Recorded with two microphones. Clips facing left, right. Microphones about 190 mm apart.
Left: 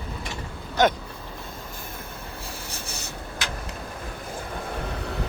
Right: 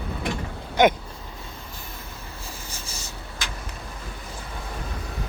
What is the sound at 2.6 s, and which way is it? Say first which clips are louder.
Writing: left 2 dB; 65° left (ahead or behind).